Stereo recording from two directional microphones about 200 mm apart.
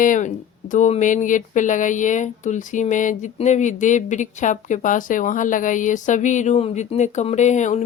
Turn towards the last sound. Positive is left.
turn(degrees=35)  # may be behind; listen again after turning